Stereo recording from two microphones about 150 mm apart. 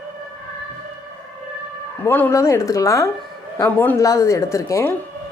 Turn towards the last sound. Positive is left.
turn(degrees=20)  # may be behind; listen again after turning